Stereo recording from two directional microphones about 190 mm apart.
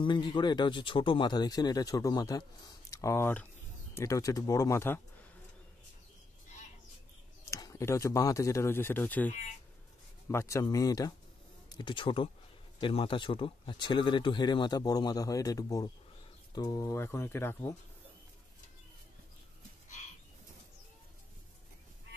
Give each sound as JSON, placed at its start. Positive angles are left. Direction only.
{"t": 0.0, "sound": "speech", "side_deg": 25}
{"t": 7.5, "sound": "speech", "side_deg": 15}